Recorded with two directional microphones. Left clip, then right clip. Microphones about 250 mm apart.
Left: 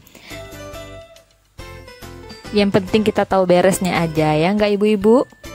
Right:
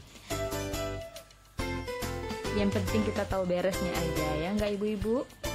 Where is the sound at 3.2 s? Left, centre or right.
Left.